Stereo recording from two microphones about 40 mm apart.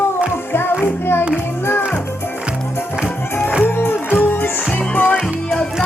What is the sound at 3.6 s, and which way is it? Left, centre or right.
Music, left.